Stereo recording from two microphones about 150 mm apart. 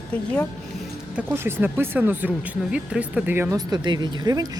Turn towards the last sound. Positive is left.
turn(degrees=-25)  # may be behind; listen again after turning